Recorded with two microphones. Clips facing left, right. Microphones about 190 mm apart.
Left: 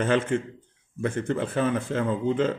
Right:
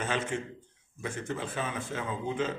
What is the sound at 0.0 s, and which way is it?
Speech, 55° left (ahead or behind).